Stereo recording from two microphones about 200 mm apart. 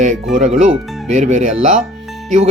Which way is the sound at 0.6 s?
35° right (ahead or behind).